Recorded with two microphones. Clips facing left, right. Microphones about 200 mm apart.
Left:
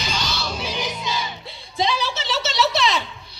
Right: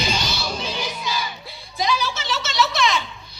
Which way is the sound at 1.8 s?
30° left (ahead or behind).